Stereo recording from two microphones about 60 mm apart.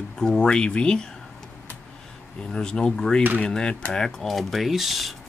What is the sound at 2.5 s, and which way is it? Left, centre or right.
Speech, centre.